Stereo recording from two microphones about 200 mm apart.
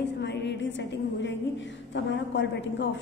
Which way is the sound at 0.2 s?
60° left (ahead or behind).